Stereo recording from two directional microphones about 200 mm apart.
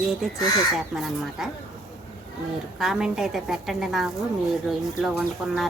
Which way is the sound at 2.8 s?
Centre (ahead or behind).